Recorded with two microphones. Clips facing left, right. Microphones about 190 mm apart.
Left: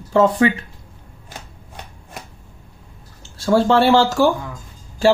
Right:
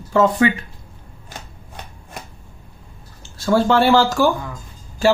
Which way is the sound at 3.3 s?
30° left (ahead or behind).